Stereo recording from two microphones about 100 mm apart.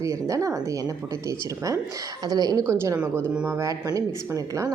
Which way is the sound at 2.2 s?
40° right (ahead or behind).